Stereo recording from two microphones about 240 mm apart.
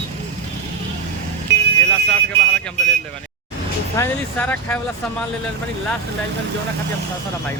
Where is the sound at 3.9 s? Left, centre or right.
Centre.